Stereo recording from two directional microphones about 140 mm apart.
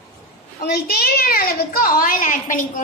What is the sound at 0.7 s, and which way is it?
A woman's voice, 90° left.